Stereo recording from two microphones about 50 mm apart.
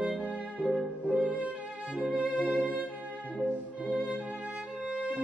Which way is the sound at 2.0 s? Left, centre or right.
Right.